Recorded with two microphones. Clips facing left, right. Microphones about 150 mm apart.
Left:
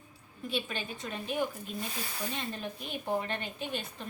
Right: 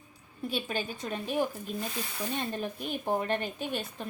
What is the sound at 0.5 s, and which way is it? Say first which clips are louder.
A woman's voice: right 2 dB; 40° right (ahead or behind).